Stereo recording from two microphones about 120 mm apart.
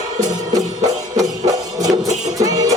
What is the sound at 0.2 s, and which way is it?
Music, 30° right (ahead or behind).